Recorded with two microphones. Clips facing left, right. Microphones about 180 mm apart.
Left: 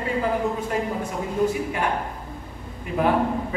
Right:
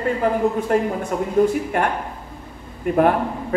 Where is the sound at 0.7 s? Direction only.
50° right (ahead or behind).